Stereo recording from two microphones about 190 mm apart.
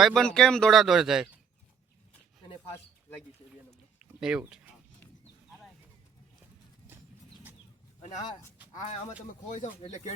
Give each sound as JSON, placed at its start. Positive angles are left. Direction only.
{"t": 0.0, "sound": "speech", "side_deg": 5}
{"t": 4.2, "sound": "speech", "side_deg": -5}
{"t": 8.7, "sound": "speech", "side_deg": 40}